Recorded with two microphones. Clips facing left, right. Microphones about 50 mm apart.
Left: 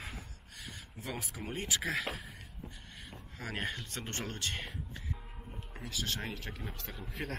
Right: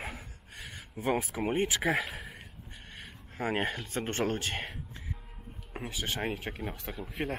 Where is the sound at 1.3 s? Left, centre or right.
Right.